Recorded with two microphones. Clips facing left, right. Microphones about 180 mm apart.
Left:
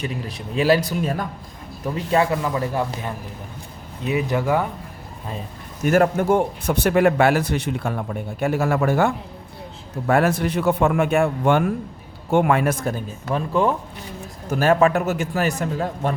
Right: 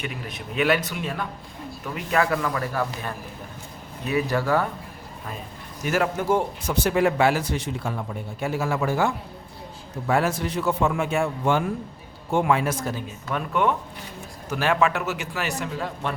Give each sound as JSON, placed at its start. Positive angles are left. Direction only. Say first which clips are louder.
{"t": 0.0, "sound": "a man's voice", "louder": "left 4 dB", "side_deg": 35}
{"t": 2.0, "sound": "speech", "louder": "left 3 dB", "side_deg": 25}
{"t": 5.8, "sound": "speech", "louder": "left 6 dB", "side_deg": 50}
{"t": 13.3, "sound": "a man's voice", "louder": "left 3 dB", "side_deg": 30}
{"t": 14.5, "sound": "a man's voice", "louder": "left 5 dB", "side_deg": 45}